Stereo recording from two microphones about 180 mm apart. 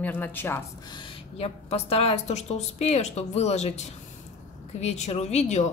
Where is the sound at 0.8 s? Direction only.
25° left (ahead or behind).